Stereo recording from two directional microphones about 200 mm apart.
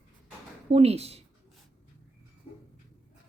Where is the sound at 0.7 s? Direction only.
30° right (ahead or behind).